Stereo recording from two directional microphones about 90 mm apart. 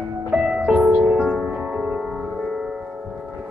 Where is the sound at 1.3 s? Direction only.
5° right (ahead or behind).